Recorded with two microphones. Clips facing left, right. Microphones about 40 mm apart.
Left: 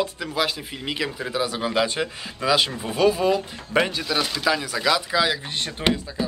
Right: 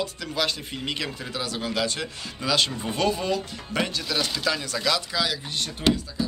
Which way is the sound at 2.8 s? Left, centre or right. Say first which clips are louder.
Left 5 dB; centre.